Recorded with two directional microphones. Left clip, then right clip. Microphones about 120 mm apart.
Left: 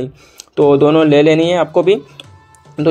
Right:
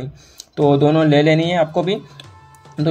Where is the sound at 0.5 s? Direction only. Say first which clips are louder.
Left 5 dB; 15° left (ahead or behind).